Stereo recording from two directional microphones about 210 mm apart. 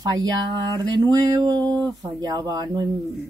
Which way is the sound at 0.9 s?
20° right (ahead or behind).